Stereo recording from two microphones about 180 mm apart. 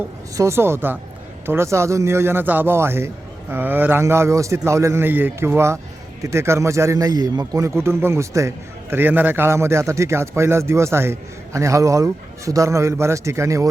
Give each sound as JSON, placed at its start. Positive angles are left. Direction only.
{"t": 0.3, "sound": "a man's voice", "side_deg": -15}